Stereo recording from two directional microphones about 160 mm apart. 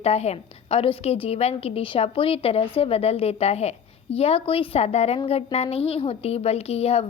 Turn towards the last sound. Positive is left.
turn(degrees=40)  # may be behind; listen again after turning